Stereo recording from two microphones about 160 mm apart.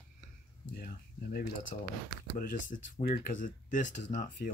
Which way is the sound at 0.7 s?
65° left (ahead or behind).